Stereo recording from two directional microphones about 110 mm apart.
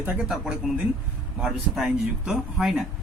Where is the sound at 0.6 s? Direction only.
5° right (ahead or behind).